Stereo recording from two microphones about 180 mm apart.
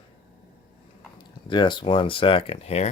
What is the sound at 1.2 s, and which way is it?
Speech, 25° left (ahead or behind).